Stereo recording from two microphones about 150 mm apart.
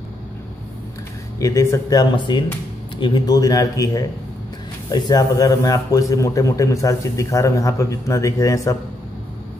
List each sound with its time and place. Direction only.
1.4 s a man's voice: 20° left (ahead or behind)